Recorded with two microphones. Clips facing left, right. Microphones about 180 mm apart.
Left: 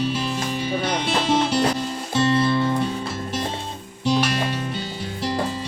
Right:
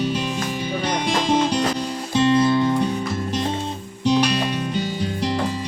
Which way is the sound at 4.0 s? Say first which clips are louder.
Right 2 dB; 15° right (ahead or behind).